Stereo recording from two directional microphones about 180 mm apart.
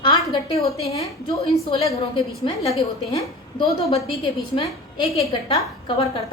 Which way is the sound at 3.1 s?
25° left (ahead or behind).